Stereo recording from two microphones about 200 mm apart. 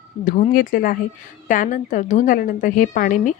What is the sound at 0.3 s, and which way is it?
A woman's voice, 40° left (ahead or behind).